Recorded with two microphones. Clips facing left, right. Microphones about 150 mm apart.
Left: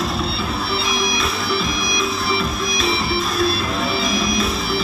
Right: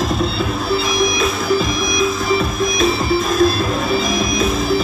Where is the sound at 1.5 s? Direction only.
45° right (ahead or behind).